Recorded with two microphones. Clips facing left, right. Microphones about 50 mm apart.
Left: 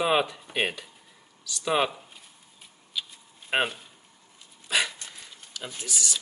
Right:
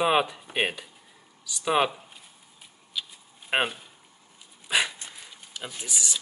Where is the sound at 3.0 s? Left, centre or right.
Centre.